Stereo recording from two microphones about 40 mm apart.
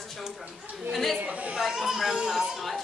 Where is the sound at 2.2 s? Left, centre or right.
Centre.